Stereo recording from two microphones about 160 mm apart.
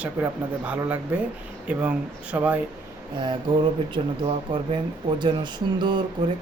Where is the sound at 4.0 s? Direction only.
40° right (ahead or behind).